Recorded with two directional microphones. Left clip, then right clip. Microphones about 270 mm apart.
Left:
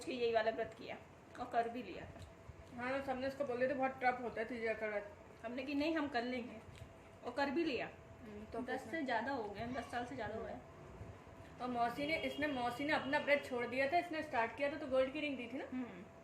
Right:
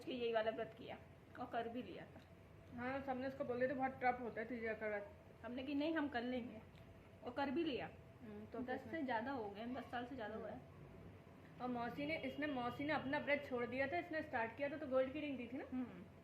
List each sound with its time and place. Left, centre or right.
0.0 s a sound: centre
1.4 s a woman's voice: centre
11.8 s a woman's voice: centre